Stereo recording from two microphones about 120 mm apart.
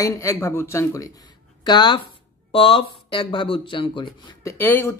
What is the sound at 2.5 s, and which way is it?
Speech, 50° left (ahead or behind).